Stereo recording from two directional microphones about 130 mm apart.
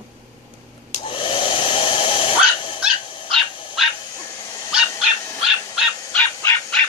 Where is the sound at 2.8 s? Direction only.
5° right (ahead or behind).